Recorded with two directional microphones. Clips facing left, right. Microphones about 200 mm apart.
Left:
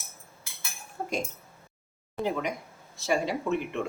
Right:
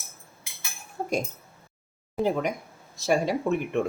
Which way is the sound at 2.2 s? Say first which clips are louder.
Right 5 dB; centre (ahead or behind).